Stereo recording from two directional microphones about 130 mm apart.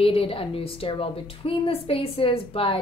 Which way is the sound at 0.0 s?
45° left (ahead or behind).